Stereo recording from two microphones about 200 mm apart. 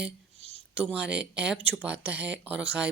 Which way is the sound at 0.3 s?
30° left (ahead or behind).